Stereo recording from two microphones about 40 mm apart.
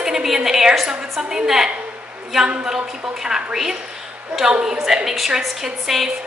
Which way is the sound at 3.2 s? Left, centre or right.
Centre.